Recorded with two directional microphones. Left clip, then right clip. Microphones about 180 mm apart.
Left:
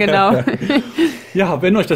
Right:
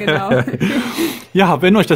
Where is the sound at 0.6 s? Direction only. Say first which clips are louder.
Left 2 dB; 45° right (ahead or behind).